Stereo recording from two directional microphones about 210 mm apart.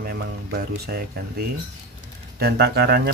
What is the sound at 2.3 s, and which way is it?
Speech, 50° right (ahead or behind).